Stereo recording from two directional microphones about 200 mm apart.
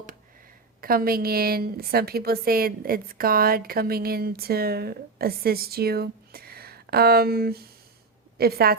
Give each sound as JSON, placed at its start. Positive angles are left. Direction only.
{"t": 0.8, "sound": "a woman's voice", "side_deg": -45}